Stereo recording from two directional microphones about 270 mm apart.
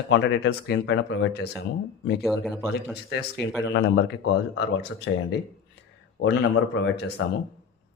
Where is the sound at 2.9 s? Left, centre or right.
Left.